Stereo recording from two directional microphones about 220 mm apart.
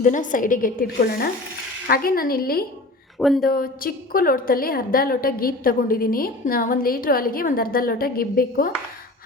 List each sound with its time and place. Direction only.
0.0 s a woman's voice: 35° left (ahead or behind)
3.2 s speech: centre (ahead or behind)
3.5 s a woman's voice: 40° left (ahead or behind)